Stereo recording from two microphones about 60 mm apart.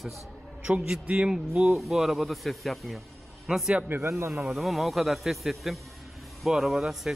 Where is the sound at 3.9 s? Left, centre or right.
Right.